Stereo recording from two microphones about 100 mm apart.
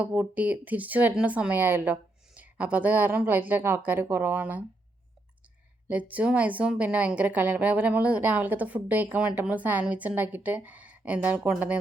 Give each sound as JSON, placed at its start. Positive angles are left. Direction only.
{"t": 0.0, "sound": "a woman's voice", "side_deg": -20}
{"t": 5.9, "sound": "a woman's voice", "side_deg": -15}